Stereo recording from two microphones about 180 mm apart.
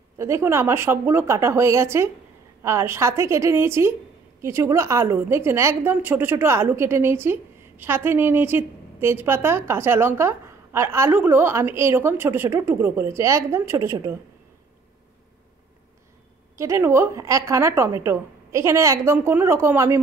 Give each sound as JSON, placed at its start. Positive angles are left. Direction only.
{"t": 0.2, "sound": "a woman's voice", "side_deg": -15}
{"t": 16.5, "sound": "a woman's voice", "side_deg": -15}